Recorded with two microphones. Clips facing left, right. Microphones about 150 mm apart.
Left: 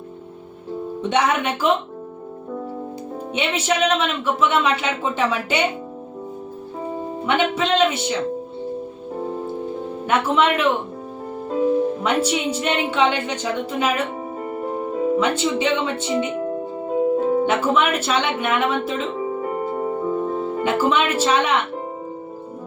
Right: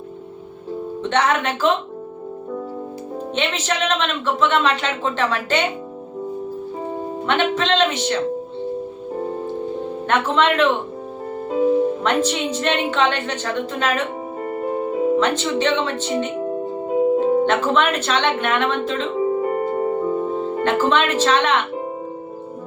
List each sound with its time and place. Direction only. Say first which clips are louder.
1.0 s speech: even; 10° left (ahead or behind)
3.3 s speech: left 2 dB; 10° left (ahead or behind)
7.3 s speech: even; 10° left (ahead or behind)
10.1 s speech: even; 10° left (ahead or behind)
11.4 s music: right 2 dB; 5° right (ahead or behind)
12.0 s speech: right 1 dB; 10° left (ahead or behind)
14.4 s music: right 3 dB; centre (ahead or behind)
15.2 s speech: right 1 dB; 10° left (ahead or behind)
17.4 s speech: right 1 dB; 10° left (ahead or behind)
19.4 s music: right 4 dB; centre (ahead or behind)